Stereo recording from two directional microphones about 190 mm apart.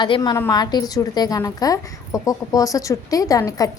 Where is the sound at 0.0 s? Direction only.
25° left (ahead or behind).